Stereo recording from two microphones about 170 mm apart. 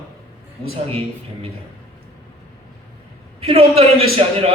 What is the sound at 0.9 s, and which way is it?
Speech, 35° right (ahead or behind).